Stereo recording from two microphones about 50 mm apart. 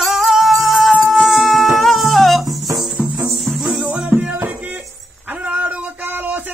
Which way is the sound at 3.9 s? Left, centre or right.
Centre.